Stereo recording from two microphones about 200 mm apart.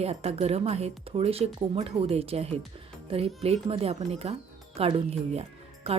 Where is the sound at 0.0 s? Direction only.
30° right (ahead or behind).